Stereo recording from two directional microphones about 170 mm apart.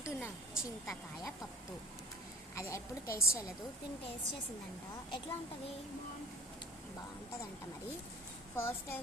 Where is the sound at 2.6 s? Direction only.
15° left (ahead or behind).